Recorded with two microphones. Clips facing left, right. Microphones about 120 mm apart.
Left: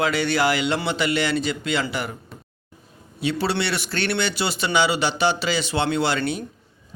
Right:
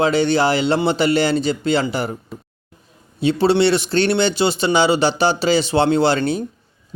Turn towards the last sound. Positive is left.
turn(degrees=-35)  # may be behind; listen again after turning